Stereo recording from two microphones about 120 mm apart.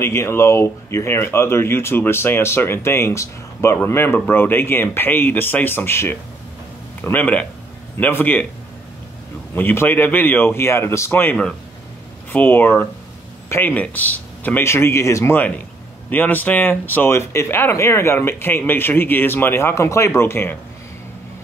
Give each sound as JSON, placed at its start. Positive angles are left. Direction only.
{"t": 0.0, "sound": "speech", "side_deg": 20}
{"t": 9.6, "sound": "speech", "side_deg": 15}